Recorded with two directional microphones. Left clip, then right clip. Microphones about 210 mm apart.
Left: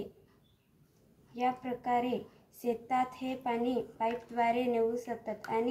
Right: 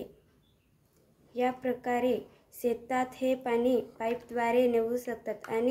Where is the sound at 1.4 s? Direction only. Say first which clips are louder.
Right 3 dB; 45° right (ahead or behind).